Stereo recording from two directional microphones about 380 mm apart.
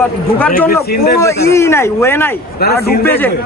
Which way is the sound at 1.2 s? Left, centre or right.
Centre.